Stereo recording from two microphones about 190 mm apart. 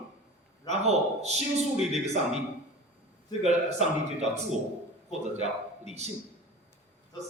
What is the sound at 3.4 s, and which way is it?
A man's voice, 35° right (ahead or behind).